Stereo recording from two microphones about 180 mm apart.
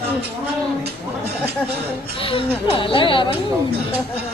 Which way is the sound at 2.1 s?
30° left (ahead or behind).